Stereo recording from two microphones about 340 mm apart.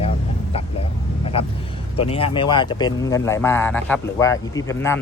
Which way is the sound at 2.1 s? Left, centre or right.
Centre.